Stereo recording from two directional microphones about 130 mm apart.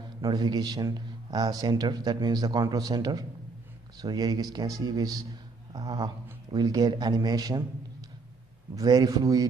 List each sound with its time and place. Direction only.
0.2 s a man's voice: 30° right (ahead or behind)
8.7 s speech: 30° right (ahead or behind)